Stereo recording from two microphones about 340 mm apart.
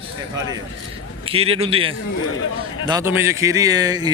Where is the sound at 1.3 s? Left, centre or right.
Centre.